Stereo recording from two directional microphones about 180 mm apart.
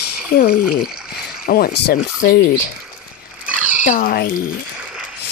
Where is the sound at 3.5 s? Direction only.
5° right (ahead or behind).